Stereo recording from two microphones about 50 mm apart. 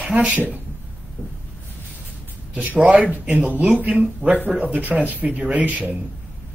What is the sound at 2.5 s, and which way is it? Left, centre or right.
A man's voice, right.